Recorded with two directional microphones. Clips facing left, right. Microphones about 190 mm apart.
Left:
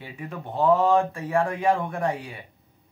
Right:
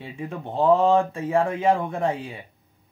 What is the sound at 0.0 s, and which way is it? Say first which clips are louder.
Speech: right 3 dB; 25° right (ahead or behind).